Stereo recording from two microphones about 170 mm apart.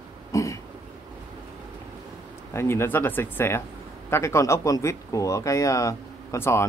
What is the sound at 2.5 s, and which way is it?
Speech, 15° left (ahead or behind).